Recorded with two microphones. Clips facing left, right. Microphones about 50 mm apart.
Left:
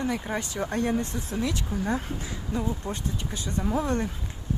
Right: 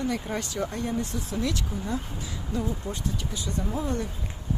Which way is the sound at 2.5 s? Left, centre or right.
Left.